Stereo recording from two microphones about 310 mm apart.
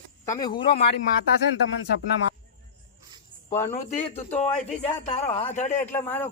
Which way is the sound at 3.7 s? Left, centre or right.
Left.